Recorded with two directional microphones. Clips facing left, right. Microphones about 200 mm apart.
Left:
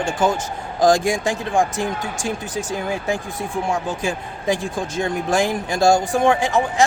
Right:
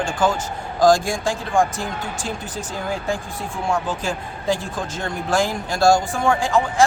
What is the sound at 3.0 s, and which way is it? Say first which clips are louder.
A man's voice: left 2 dB; 20° left (ahead or behind).